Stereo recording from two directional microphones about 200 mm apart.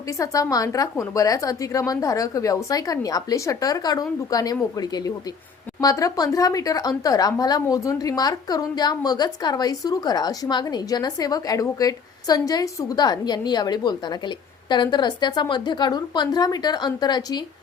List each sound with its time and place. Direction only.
0.1 s a woman's voice: 15° left (ahead or behind)